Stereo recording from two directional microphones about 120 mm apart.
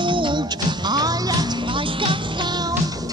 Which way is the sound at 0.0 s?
40° right (ahead or behind).